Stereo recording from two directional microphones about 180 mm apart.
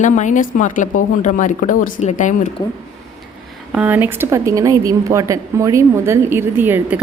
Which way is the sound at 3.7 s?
10° right (ahead or behind).